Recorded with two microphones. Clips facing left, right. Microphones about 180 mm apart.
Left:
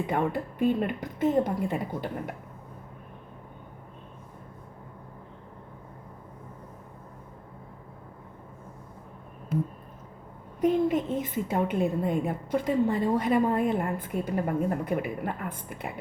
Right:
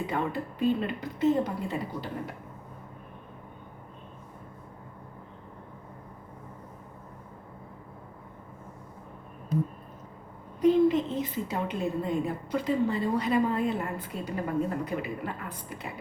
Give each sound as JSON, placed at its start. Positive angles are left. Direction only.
{"t": 0.1, "sound": "a woman's voice", "side_deg": 50}
{"t": 10.6, "sound": "a woman's voice", "side_deg": 50}